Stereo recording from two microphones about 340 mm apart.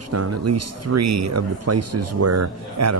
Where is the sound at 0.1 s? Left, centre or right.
Right.